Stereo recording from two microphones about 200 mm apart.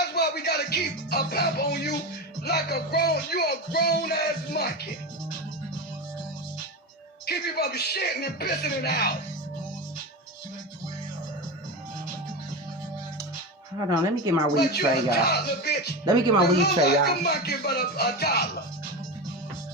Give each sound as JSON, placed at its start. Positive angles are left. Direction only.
{"t": 0.0, "sound": "music", "side_deg": 55}
{"t": 7.3, "sound": "speech", "side_deg": 50}
{"t": 13.7, "sound": "speech", "side_deg": -15}
{"t": 14.5, "sound": "speech", "side_deg": 55}